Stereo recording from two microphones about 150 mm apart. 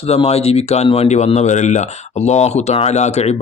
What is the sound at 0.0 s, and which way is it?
Speech, 45° left (ahead or behind).